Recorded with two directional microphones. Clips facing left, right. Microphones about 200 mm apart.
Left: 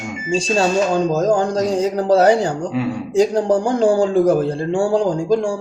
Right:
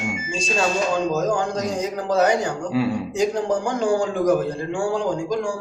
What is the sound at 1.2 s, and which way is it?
A man's voice, 40° left (ahead or behind).